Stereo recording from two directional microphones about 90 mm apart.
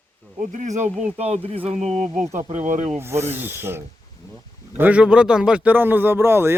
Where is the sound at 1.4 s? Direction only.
90° right.